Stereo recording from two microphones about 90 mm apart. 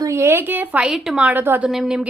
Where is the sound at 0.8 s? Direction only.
5° right (ahead or behind).